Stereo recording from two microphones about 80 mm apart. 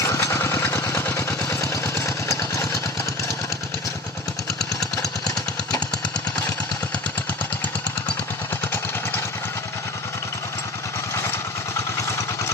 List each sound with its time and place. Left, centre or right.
0.0 s vehicle: left
11.1 s vehicle: left